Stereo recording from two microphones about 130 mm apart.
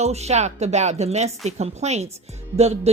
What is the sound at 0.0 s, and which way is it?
Speech, 55° right (ahead or behind).